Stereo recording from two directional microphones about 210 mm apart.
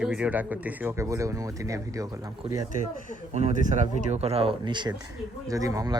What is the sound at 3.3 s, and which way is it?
Speech, 30° right (ahead or behind).